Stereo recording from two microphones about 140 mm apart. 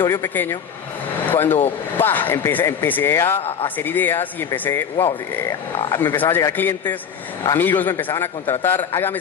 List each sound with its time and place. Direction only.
0.1 s speech: 15° left (ahead or behind)